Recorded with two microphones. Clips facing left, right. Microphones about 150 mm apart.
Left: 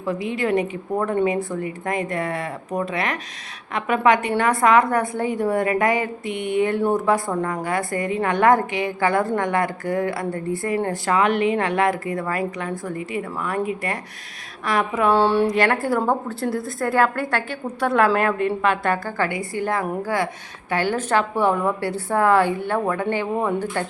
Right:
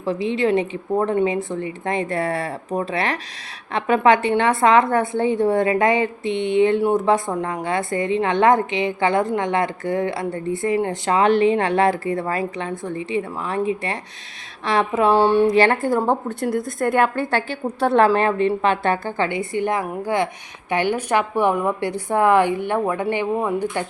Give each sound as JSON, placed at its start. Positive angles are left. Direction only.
{"t": 0.0, "sound": "a woman's voice", "side_deg": -25}
{"t": 15.1, "sound": "a woman's voice", "side_deg": -15}
{"t": 15.5, "sound": "a woman's voice", "side_deg": -25}
{"t": 23.3, "sound": "speech", "side_deg": -5}